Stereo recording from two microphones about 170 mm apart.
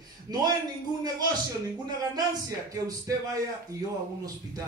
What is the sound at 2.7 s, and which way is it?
A man's voice, 20° right (ahead or behind).